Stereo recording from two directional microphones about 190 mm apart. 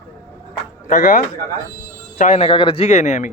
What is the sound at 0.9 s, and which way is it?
A man's voice, 40° left (ahead or behind).